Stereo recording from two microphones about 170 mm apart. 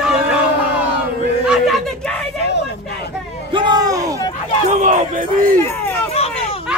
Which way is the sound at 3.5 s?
25° right (ahead or behind).